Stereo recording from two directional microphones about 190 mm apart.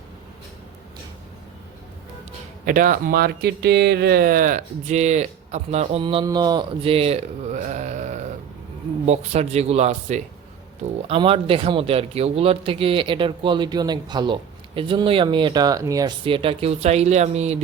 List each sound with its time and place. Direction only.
2.6 s speech: 45° right (ahead or behind)